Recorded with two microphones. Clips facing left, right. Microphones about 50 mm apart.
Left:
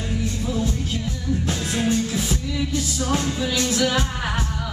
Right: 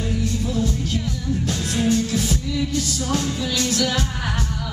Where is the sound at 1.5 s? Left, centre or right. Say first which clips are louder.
Right 2 dB; centre.